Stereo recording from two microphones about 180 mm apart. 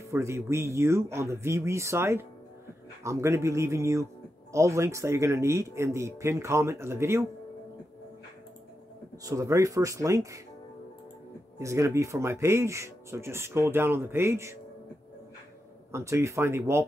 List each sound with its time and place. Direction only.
0.1 s speech: 15° right (ahead or behind)
9.2 s speech: 15° right (ahead or behind)
11.5 s speech: 15° right (ahead or behind)
15.9 s speech: 15° right (ahead or behind)